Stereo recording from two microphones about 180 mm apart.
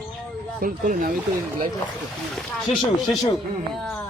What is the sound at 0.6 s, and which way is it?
Speech, 50° right (ahead or behind).